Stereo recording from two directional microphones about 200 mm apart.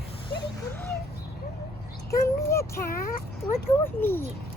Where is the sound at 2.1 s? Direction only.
15° left (ahead or behind).